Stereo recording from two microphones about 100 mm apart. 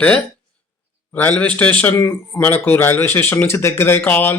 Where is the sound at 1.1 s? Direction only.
20° left (ahead or behind).